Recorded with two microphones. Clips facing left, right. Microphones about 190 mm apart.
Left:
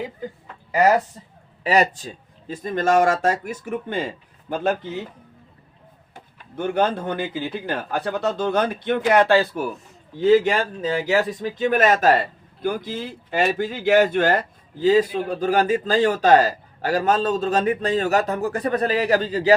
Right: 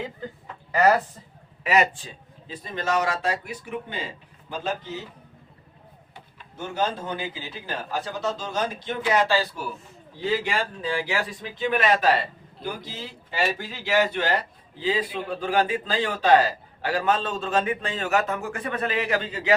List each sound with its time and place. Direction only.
0.7 s speech: 10° left (ahead or behind)
1.6 s a man's voice: 35° left (ahead or behind); by 5.0 s 55° left (ahead or behind)
6.1 s speech: 60° left (ahead or behind)
10.2 s a man's voice: 45° left (ahead or behind)